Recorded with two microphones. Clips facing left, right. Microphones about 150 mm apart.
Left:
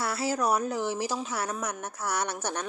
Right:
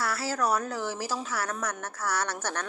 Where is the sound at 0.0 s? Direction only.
20° left (ahead or behind).